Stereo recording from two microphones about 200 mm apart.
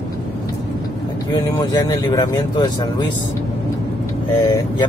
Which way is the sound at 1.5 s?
20° left (ahead or behind).